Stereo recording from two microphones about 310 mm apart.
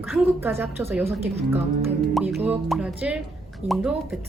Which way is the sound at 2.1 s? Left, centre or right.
Centre.